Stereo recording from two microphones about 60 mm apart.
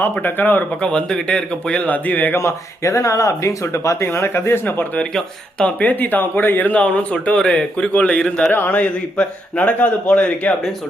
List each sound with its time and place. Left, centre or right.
0.0 s speech: left
0.8 s speech: centre
2.3 s speech: left
4.6 s speech: left
5.1 s speech: centre
5.8 s speech: left